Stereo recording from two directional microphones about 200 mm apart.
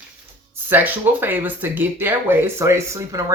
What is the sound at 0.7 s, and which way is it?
Speech, 10° right (ahead or behind).